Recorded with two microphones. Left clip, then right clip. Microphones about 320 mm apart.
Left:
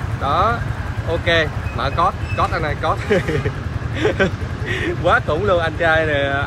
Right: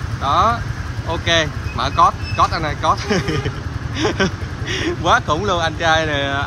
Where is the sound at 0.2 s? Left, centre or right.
Centre.